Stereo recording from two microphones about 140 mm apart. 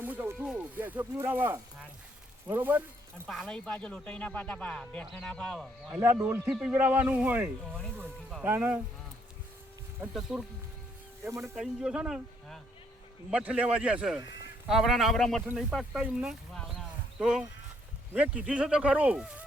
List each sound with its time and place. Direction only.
0.0 s a sound: 15° right (ahead or behind)
0.8 s speech: 15° right (ahead or behind)
3.2 s speech: 5° left (ahead or behind)
5.9 s speech: 15° right (ahead or behind)
6.4 s speech: 5° right (ahead or behind)
10.2 s speech: 5° right (ahead or behind)
11.2 s speech: 20° right (ahead or behind)
11.5 s speech: 5° right (ahead or behind)